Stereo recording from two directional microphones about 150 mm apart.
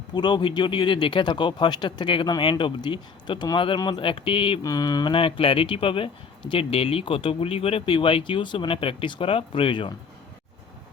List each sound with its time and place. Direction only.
0.1 s speech: 30° left (ahead or behind)
4.6 s speech: 25° left (ahead or behind)